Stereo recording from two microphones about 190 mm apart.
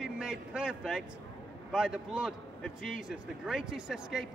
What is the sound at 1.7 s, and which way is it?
A man's voice, 5° right (ahead or behind).